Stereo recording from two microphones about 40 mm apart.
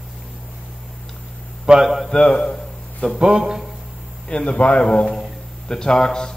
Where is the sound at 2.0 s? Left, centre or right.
Left.